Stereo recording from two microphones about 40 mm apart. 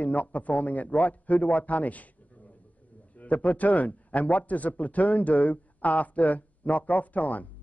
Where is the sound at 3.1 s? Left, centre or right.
Left.